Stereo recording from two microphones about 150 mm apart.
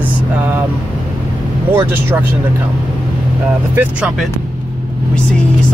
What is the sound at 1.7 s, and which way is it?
Speech, 15° right (ahead or behind).